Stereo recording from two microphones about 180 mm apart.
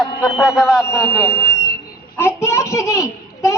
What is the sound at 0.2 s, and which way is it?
Speech, 5° right (ahead or behind).